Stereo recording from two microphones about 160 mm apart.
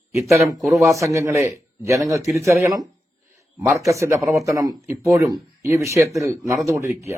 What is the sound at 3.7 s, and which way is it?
Speech, 20° right (ahead or behind).